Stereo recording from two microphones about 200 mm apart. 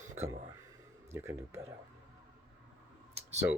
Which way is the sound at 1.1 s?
15° right (ahead or behind).